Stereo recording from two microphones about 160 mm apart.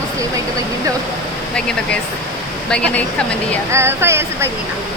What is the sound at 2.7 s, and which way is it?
Speech, 5° left (ahead or behind).